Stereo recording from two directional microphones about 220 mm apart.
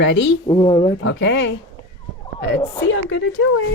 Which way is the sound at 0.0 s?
55° left (ahead or behind).